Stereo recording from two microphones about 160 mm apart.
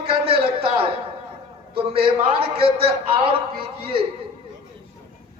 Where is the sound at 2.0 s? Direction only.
35° right (ahead or behind).